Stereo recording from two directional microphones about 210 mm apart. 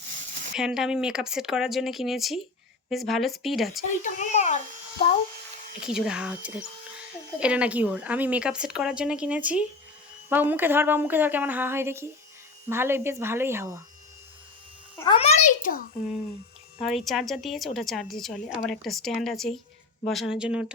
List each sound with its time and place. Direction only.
0.5 s a woman's voice: 5° right (ahead or behind)
4.0 s a sound: 35° left (ahead or behind)
5.8 s a woman's voice: 5° right (ahead or behind)
14.9 s a child's voice: 20° left (ahead or behind); by 15.9 s 40° left (ahead or behind)
16.7 s a woman's voice: centre (ahead or behind)